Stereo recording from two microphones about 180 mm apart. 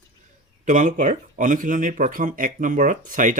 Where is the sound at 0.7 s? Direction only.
45° right (ahead or behind).